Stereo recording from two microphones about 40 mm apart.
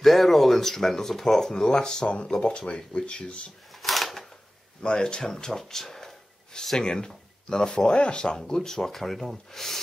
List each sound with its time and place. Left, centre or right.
0.0 s speech: centre; by 3.4 s left
3.7 s a sound: centre
4.8 s speech: left
6.8 s speech: left
8.5 s speech: centre